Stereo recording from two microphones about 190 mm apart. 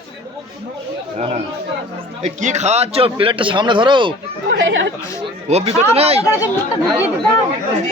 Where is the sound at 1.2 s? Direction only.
35° right (ahead or behind).